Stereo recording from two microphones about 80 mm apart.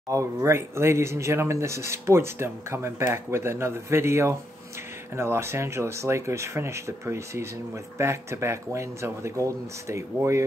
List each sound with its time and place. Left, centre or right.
0.1 s speech: right